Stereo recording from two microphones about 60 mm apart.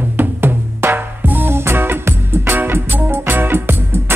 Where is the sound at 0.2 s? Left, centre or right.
Right.